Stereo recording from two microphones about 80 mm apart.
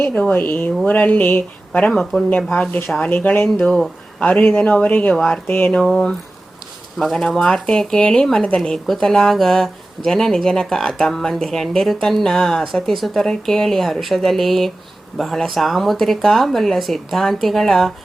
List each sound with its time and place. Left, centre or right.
0.1 s speech: centre
1.9 s speech: centre
2.5 s speech: centre
5.1 s speech: centre
5.5 s speech: left
7.0 s speech: centre